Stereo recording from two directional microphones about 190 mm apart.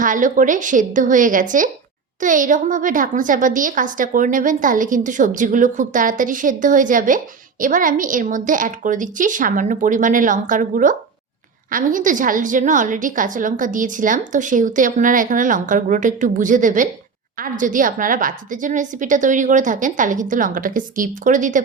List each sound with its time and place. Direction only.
0.0 s a woman's voice: 45° right (ahead or behind)